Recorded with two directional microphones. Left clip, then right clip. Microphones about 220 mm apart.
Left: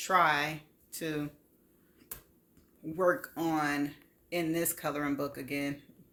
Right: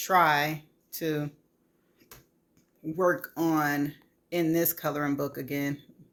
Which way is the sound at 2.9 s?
15° right (ahead or behind).